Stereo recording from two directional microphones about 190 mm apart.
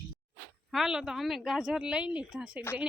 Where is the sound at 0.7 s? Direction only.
Centre (ahead or behind).